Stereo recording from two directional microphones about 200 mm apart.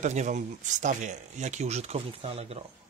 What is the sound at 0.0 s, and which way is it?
Speech, 35° right (ahead or behind).